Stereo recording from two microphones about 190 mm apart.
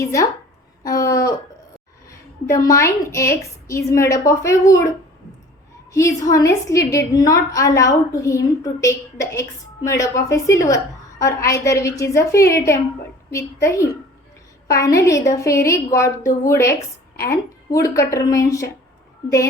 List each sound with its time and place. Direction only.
0.0 s a woman's voice: 15° left (ahead or behind)
0.9 s a sound: 20° left (ahead or behind)
2.0 s a woman's voice: 15° left (ahead or behind)
5.9 s a woman's voice: 15° left (ahead or behind)